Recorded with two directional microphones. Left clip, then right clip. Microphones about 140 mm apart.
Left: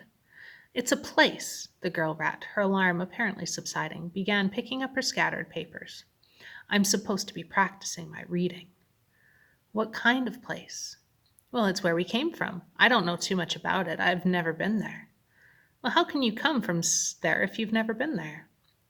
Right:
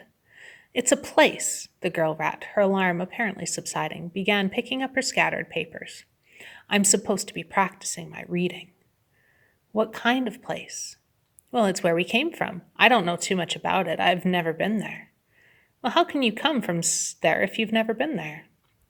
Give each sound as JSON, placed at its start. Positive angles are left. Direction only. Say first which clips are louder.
{"t": 0.3, "sound": "a woman's voice", "louder": "right 5 dB", "side_deg": -20}
{"t": 9.7, "sound": "a woman's voice", "louder": "right 3 dB", "side_deg": -15}